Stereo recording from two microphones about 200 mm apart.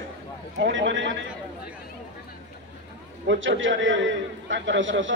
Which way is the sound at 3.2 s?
70° right (ahead or behind).